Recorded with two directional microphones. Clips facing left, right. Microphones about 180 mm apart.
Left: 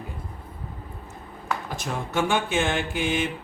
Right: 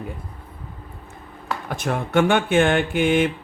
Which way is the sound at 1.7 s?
60° right (ahead or behind).